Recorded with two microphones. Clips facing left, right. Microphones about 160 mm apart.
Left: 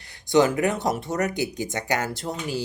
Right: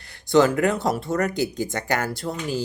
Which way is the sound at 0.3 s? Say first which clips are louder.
Right 2 dB; 20° left (ahead or behind).